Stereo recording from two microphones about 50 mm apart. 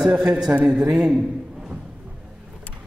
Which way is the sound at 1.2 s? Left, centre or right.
Right.